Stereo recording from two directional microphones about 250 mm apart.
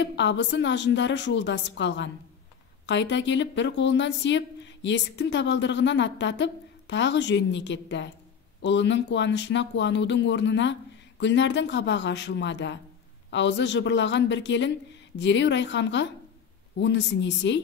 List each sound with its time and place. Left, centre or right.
0.0 s a woman's voice: left